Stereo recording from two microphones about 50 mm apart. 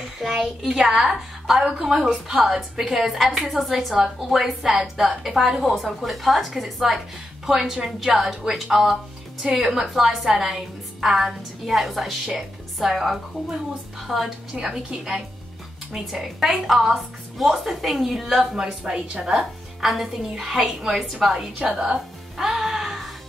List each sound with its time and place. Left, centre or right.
0.2 s a woman's voice: centre
14.5 s a woman's voice: centre
18.7 s a woman's voice: centre
21.5 s a woman's voice: right
22.4 s music: centre